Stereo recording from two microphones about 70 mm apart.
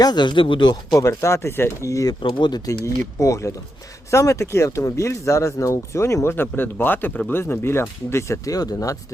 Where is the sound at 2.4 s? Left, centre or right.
Left.